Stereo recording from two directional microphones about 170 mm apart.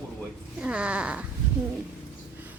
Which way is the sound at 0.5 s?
5° right (ahead or behind).